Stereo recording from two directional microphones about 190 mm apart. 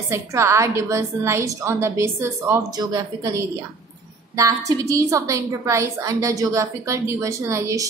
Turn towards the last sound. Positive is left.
turn(degrees=-15)  # may be behind; listen again after turning